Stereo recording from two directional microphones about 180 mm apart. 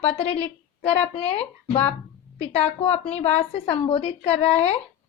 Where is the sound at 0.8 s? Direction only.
35° left (ahead or behind).